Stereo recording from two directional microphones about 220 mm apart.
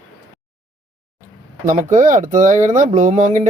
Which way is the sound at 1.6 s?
35° right (ahead or behind).